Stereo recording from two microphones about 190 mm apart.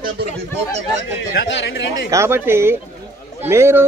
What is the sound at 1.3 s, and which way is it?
Speech, 65° left (ahead or behind).